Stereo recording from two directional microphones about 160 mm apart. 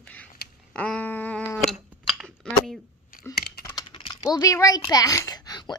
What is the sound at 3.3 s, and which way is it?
Typing, 85° left.